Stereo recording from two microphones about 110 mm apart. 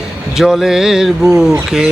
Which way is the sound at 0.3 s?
5° right (ahead or behind).